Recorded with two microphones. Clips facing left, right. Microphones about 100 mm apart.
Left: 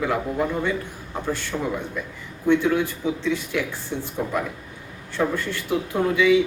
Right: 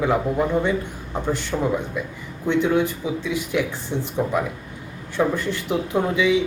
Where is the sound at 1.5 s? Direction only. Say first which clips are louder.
Right 4 dB; 15° right (ahead or behind).